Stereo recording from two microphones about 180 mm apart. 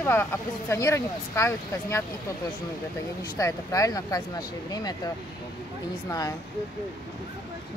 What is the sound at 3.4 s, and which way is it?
Speech, 15° left (ahead or behind).